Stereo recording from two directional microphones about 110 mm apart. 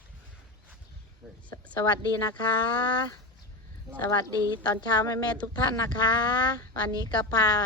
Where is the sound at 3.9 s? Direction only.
35° left (ahead or behind).